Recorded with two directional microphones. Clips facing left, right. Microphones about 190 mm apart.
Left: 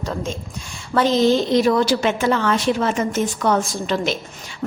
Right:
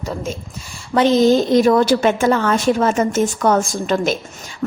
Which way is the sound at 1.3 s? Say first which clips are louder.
Right 3 dB; 45° right (ahead or behind).